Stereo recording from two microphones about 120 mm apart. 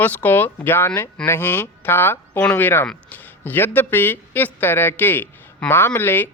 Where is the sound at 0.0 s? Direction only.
15° left (ahead or behind).